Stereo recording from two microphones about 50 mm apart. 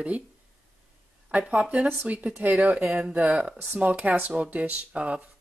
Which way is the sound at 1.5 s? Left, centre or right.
Right.